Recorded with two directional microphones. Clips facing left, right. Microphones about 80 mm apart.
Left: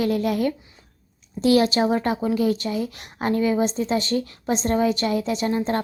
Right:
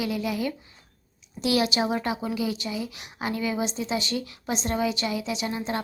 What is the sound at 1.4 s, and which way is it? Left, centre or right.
A woman's voice, left.